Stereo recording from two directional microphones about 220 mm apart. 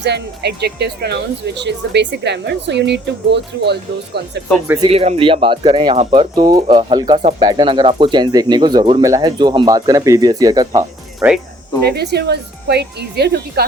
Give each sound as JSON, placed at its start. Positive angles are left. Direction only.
{"t": 0.0, "sound": "speech", "side_deg": -50}
{"t": 4.8, "sound": "speech", "side_deg": -25}
{"t": 7.2, "sound": "speech", "side_deg": -30}
{"t": 7.4, "sound": "speech", "side_deg": -20}
{"t": 11.9, "sound": "speech", "side_deg": -45}